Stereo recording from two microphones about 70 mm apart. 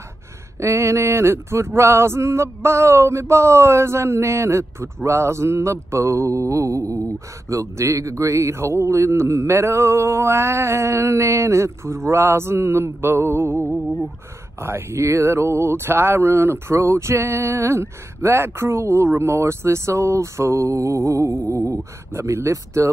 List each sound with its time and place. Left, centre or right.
0.6 s speech: right
14.6 s speech: right